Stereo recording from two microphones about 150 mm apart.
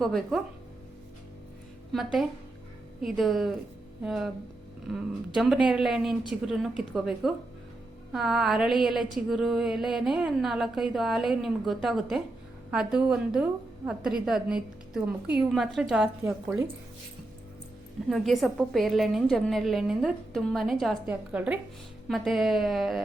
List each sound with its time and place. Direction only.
0.0 s a woman's voice: centre (ahead or behind)
1.9 s a woman's voice: centre (ahead or behind)
16.2 s a woman's voice: 20° right (ahead or behind)
18.1 s a woman's voice: centre (ahead or behind)